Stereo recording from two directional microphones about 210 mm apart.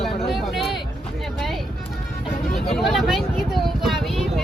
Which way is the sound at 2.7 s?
Centre (ahead or behind).